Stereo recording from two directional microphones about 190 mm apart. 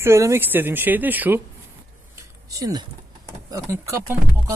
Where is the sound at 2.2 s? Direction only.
20° right (ahead or behind).